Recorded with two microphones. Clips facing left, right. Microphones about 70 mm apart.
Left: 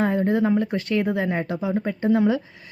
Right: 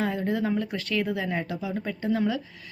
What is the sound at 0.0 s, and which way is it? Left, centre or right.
Speech, left.